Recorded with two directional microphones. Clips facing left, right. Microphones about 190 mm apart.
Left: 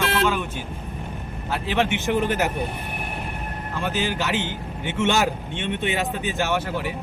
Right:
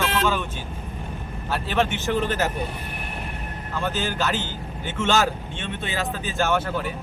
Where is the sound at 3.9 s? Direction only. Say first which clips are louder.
Left 3 dB; 15° left (ahead or behind).